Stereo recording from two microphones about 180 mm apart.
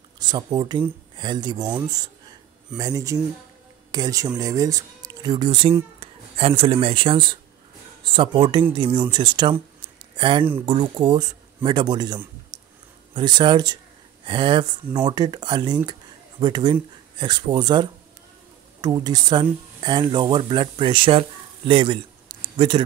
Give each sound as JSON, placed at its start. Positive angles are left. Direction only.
{"t": 0.2, "sound": "speech", "side_deg": -25}
{"t": 12.5, "sound": "a sound", "side_deg": -25}
{"t": 13.1, "sound": "speech", "side_deg": -25}